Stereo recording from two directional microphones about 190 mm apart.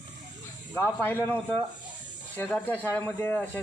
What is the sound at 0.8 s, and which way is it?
Speech, 10° left (ahead or behind).